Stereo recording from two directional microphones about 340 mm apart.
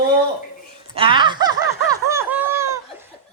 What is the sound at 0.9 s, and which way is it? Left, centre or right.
Speech, centre.